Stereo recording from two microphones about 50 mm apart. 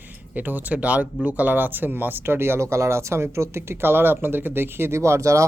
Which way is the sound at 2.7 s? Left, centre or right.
Right.